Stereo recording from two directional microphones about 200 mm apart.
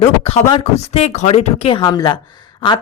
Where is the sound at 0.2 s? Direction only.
30° left (ahead or behind).